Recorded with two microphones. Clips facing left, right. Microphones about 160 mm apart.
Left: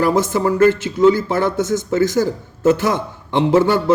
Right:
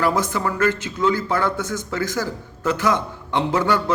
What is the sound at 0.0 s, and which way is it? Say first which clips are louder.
Speech: left 5 dB; 25° left (ahead or behind).